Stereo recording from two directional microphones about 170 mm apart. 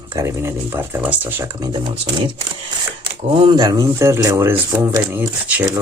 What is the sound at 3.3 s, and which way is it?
Speech, 30° right (ahead or behind).